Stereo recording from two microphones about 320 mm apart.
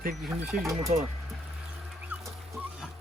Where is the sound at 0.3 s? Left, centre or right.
Centre.